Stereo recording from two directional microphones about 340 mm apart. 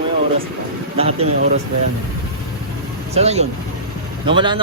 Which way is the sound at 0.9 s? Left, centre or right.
Centre.